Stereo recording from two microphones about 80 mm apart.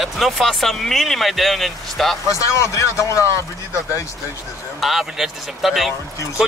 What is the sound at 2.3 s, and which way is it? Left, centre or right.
Speech, left.